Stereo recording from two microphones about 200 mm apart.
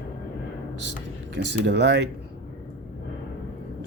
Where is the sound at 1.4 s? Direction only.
60° right (ahead or behind).